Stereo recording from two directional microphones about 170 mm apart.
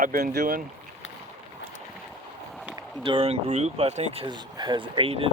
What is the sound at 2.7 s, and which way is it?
Speech, 30° right (ahead or behind).